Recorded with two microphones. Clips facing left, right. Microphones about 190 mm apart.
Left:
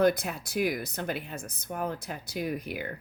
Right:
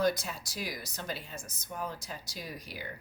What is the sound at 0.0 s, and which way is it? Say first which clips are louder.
Speech: left 5 dB; 60° left (ahead or behind).